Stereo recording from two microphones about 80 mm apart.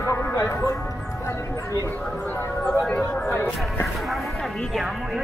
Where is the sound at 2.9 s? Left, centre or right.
Left.